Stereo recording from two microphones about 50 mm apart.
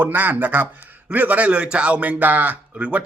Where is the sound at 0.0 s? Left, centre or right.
Right.